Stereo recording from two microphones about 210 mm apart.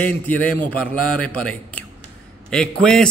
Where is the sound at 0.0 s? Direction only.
5° left (ahead or behind).